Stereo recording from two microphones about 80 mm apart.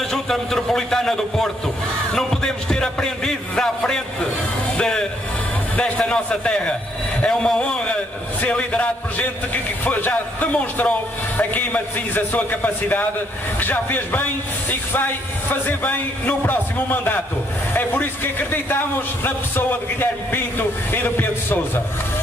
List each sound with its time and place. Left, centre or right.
0.1 s a man's voice: centre; by 14.2 s left
15.8 s a man's voice: left